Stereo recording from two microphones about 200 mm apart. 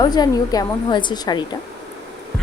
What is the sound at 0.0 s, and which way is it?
Speech, 20° left (ahead or behind).